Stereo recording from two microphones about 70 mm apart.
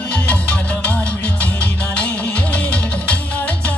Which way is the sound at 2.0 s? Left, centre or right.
Centre.